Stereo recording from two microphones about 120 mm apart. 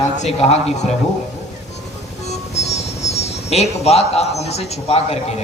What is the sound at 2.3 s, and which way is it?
A man's voice, 65° left (ahead or behind).